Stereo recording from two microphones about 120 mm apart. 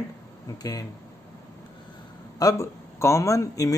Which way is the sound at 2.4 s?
25° left (ahead or behind).